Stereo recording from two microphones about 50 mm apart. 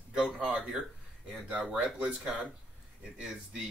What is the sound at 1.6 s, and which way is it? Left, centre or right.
Speech, centre.